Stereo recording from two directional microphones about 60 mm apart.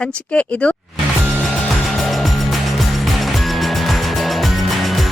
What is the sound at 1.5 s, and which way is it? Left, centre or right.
Music, centre.